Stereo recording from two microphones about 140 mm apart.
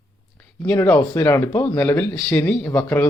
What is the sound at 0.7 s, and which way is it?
Speech, 10° left (ahead or behind).